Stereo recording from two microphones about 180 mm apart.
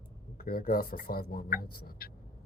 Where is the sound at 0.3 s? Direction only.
55° left (ahead or behind).